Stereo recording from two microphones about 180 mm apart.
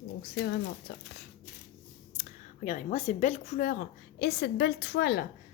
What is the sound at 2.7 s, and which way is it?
A woman's voice, 40° left (ahead or behind).